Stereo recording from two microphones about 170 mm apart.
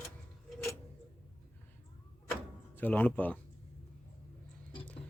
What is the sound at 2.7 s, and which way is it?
Speech, 10° left (ahead or behind).